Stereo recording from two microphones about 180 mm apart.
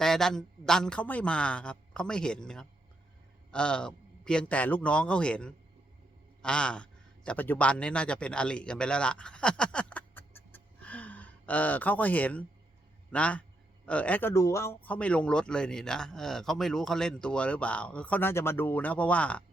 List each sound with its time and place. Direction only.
0.0 s a man's voice: 5° left (ahead or behind)